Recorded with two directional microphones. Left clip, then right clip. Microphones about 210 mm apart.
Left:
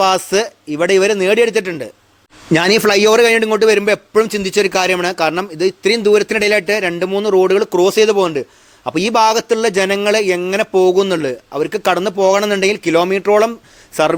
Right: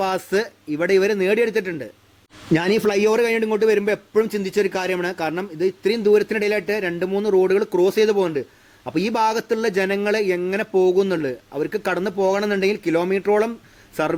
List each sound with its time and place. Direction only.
0.0 s a man's voice: 5° left (ahead or behind)